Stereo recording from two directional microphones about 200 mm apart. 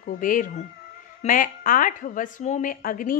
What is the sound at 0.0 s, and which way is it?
A woman's voice, 45° left (ahead or behind).